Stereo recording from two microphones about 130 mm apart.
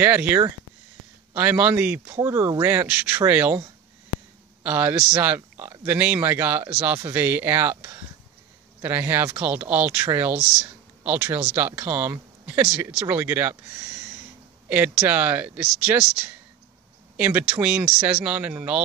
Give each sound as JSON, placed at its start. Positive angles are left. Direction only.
{"t": 0.0, "sound": "speech", "side_deg": -15}
{"t": 4.6, "sound": "speech", "side_deg": -10}